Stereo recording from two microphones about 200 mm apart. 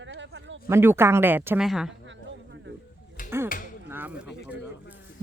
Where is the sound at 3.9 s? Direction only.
10° right (ahead or behind).